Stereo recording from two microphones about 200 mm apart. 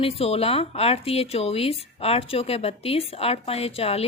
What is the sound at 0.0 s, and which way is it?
Speech, 30° left (ahead or behind).